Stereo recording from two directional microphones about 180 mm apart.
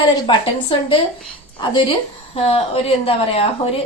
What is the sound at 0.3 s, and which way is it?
Speech, 30° left (ahead or behind).